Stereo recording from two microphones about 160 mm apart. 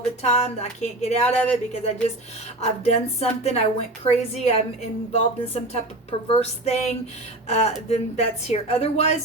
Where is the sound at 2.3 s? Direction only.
40° left (ahead or behind).